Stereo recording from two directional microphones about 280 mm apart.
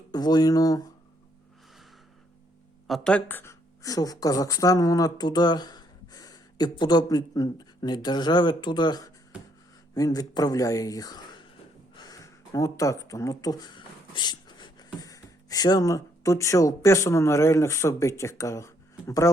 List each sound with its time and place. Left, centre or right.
0.1 s speech: centre
2.8 s speech: centre
11.9 s a sound: centre
15.0 s speech: centre